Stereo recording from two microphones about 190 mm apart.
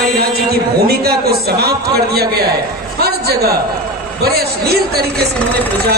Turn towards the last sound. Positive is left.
turn(degrees=-55)  # may be behind; listen again after turning